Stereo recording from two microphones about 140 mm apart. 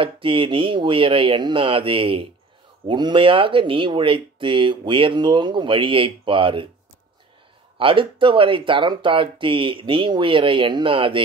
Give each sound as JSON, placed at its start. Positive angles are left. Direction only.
{"t": 0.0, "sound": "speech", "side_deg": -40}
{"t": 7.7, "sound": "speech", "side_deg": -40}